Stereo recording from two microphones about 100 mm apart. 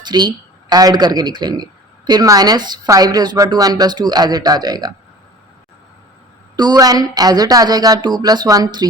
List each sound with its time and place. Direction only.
0.0 s speech: 45° right (ahead or behind)
6.6 s speech: 40° right (ahead or behind)